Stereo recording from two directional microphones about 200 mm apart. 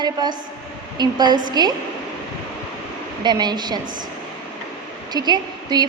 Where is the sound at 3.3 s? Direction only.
20° right (ahead or behind).